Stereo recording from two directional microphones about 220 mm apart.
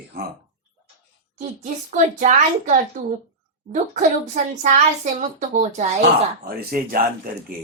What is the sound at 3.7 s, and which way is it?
Speech, 35° right (ahead or behind).